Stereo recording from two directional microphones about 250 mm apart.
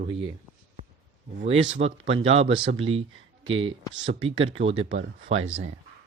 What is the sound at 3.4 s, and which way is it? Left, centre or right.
Speech, right.